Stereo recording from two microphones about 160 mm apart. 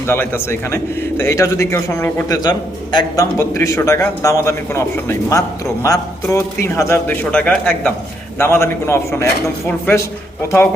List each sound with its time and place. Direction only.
0.1 s a man's voice: 15° left (ahead or behind)